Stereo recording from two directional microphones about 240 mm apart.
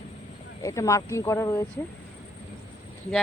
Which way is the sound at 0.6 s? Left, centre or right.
Centre.